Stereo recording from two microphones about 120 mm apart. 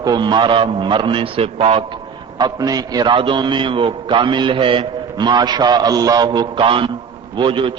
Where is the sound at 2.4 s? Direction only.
30° right (ahead or behind).